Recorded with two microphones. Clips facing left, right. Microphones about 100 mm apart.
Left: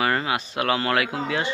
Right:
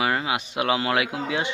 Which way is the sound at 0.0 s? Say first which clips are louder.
Left 1 dB; 10° right (ahead or behind).